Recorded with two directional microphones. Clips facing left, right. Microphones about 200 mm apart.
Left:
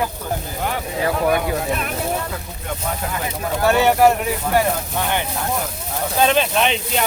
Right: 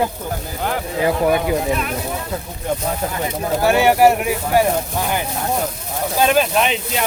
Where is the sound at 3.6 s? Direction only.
10° right (ahead or behind).